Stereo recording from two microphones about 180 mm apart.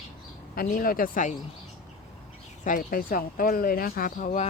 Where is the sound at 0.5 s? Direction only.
55° left (ahead or behind).